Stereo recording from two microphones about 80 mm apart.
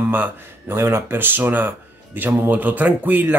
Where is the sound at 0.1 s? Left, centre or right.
Right.